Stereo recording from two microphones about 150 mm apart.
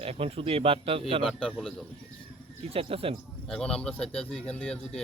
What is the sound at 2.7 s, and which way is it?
Speech, 40° right (ahead or behind).